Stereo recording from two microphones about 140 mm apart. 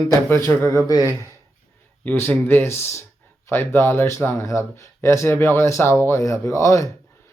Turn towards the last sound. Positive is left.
turn(degrees=20)  # may be behind; listen again after turning